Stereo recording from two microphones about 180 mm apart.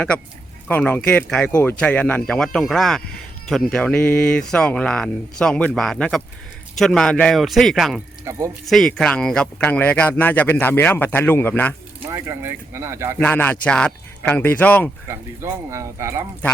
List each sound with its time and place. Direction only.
0.7 s speech: 10° left (ahead or behind)
8.2 s speech: 15° right (ahead or behind)
8.6 s speech: centre (ahead or behind)
12.0 s speech: 15° right (ahead or behind)
13.1 s speech: 10° left (ahead or behind)
15.0 s speech: 15° right (ahead or behind)